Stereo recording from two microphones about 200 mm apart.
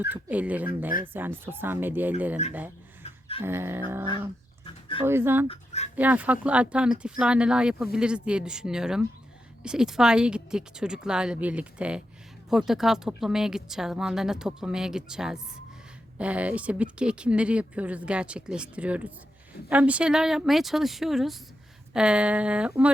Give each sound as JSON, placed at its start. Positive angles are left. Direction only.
{"t": 0.0, "sound": "speech", "side_deg": -10}
{"t": 3.0, "sound": "a sound", "side_deg": 30}
{"t": 3.4, "sound": "speech", "side_deg": -10}
{"t": 4.6, "sound": "dog", "side_deg": 25}
{"t": 5.0, "sound": "speech", "side_deg": -10}
{"t": 5.5, "sound": "speech", "side_deg": 35}
{"t": 6.0, "sound": "speech", "side_deg": -10}